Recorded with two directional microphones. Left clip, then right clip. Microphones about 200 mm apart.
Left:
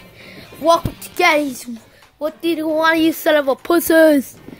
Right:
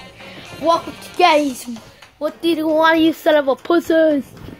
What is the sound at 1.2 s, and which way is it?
Speech, 25° left (ahead or behind).